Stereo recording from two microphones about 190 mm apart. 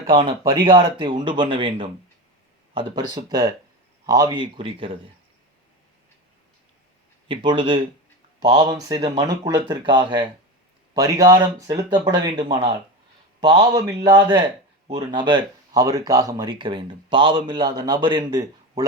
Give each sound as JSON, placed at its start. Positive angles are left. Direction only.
{"t": 0.1, "sound": "a man's voice", "side_deg": -25}
{"t": 7.3, "sound": "a man's voice", "side_deg": -25}